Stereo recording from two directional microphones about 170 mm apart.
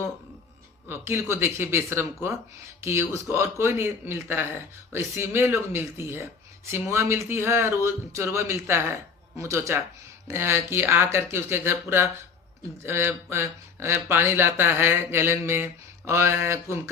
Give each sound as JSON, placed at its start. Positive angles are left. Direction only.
{"t": 0.9, "sound": "speech", "side_deg": -15}